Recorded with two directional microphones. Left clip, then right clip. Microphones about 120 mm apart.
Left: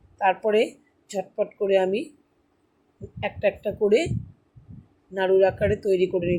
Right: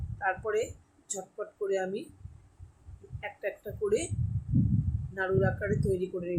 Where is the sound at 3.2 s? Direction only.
45° left (ahead or behind).